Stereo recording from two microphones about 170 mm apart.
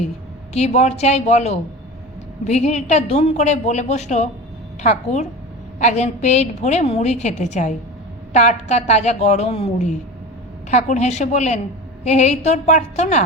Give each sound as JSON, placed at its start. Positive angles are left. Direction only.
{"t": 0.5, "sound": "a woman's voice", "side_deg": 40}